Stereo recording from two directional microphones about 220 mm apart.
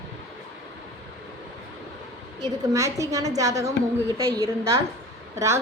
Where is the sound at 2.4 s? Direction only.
15° right (ahead or behind).